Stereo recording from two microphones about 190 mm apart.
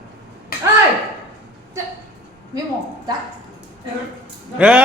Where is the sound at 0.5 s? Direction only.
55° left (ahead or behind).